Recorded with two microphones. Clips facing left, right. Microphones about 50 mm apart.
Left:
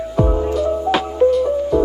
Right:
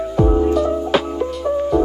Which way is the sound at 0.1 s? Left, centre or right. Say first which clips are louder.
Right 3 dB; centre.